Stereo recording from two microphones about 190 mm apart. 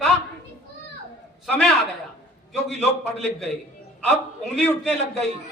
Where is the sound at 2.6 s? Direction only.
60° left (ahead or behind).